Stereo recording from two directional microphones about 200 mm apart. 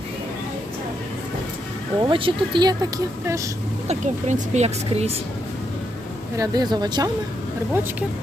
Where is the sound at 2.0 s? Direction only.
25° right (ahead or behind).